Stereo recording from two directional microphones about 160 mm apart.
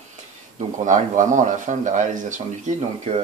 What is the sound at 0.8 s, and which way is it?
Speech, 50° right (ahead or behind).